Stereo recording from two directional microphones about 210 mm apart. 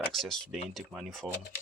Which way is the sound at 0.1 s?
Centre (ahead or behind).